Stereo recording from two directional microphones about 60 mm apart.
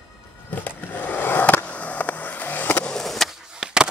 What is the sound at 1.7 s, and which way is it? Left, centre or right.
Skateboard, left.